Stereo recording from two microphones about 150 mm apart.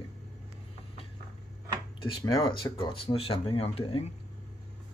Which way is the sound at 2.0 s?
35° left (ahead or behind).